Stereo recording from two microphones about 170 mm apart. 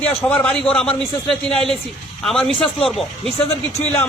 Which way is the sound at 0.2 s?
5° left (ahead or behind).